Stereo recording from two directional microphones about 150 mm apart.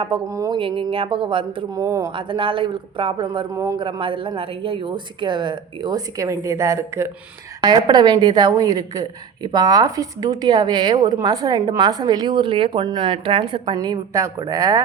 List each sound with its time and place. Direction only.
0.3 s a woman's voice: 20° right (ahead or behind)
0.6 s speech: 35° right (ahead or behind)
1.7 s a woman's voice: 20° right (ahead or behind)
2.1 s speech: 35° right (ahead or behind)
3.5 s a woman's voice: 20° right (ahead or behind)
3.8 s a woman's voice: 35° right (ahead or behind)